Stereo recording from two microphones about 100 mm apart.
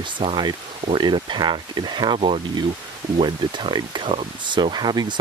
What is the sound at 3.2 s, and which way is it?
Speech, 55° right (ahead or behind).